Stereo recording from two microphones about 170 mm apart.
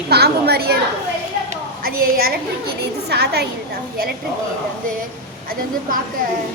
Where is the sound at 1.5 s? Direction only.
60° right (ahead or behind).